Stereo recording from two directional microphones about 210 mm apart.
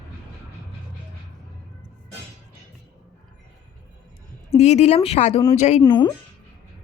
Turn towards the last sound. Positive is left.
turn(degrees=20)  # may be behind; listen again after turning